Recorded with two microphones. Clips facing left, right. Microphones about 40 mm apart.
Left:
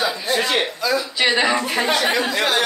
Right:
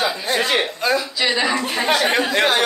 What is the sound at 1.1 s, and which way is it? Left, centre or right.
Speech, left.